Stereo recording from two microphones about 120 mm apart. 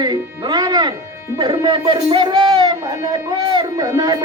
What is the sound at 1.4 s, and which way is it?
Speech, 40° right (ahead or behind).